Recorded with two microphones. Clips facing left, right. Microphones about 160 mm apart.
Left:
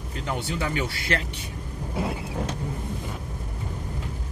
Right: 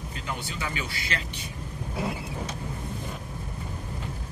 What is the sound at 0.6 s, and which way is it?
Speech, 55° left (ahead or behind).